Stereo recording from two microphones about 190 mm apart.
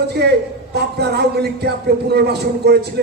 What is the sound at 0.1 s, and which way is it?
A man's voice, 60° right (ahead or behind).